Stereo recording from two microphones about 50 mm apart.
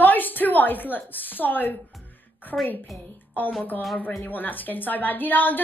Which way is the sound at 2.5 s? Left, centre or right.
Centre.